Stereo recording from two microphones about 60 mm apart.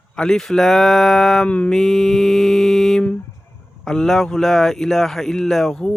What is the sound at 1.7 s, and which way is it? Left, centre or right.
Speech, centre.